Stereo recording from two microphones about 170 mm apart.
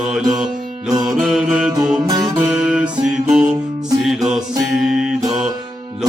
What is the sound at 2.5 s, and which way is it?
Music, 5° right (ahead or behind).